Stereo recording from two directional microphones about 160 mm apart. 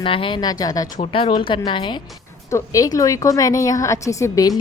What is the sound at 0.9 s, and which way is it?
A woman's voice, 35° left (ahead or behind).